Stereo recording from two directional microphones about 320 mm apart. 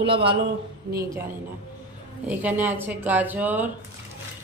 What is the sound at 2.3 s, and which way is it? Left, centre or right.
Speech, centre.